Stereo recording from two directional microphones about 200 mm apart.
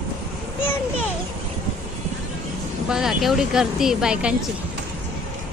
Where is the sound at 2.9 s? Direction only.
5° right (ahead or behind).